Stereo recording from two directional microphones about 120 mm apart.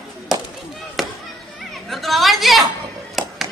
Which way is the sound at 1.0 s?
Centre (ahead or behind).